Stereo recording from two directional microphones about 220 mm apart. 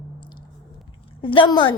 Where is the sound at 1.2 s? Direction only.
20° left (ahead or behind).